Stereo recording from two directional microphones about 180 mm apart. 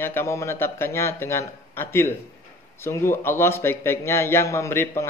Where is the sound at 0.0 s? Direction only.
15° left (ahead or behind).